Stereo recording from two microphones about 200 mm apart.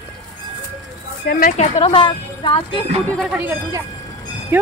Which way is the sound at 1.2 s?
50° left (ahead or behind).